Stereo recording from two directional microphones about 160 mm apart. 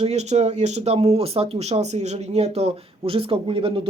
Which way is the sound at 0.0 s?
45° right (ahead or behind).